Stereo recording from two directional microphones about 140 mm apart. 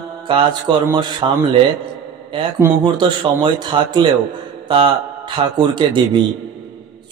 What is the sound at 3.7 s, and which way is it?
Speech, 35° right (ahead or behind).